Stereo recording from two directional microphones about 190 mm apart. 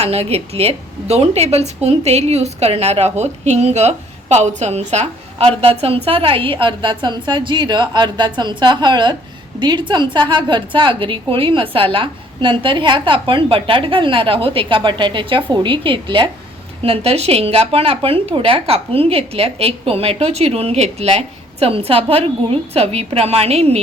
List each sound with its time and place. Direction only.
0.0 s a woman's voice: 35° right (ahead or behind)